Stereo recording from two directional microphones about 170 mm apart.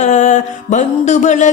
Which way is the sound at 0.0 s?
45° left (ahead or behind).